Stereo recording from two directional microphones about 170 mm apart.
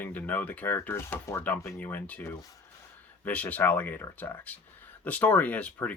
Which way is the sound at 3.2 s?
10° left (ahead or behind).